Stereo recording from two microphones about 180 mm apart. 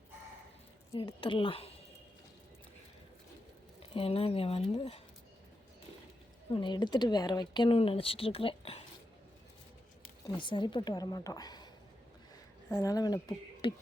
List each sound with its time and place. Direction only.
0.9 s speech: 30° left (ahead or behind)
3.9 s speech: 30° left (ahead or behind)
6.5 s speech: 25° left (ahead or behind)
10.2 s speech: 25° left (ahead or behind)